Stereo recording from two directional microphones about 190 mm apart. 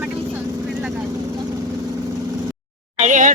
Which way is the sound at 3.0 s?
40° right (ahead or behind).